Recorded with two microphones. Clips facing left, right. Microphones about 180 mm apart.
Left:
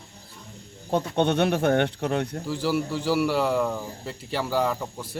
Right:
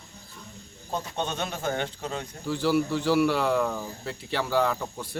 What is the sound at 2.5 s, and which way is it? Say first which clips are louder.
Speech: right 5 dB; 10° left (ahead or behind).